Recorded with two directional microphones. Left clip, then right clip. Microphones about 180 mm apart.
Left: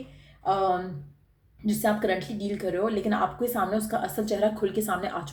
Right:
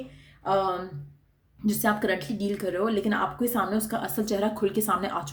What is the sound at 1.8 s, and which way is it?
A woman's voice, 40° right (ahead or behind).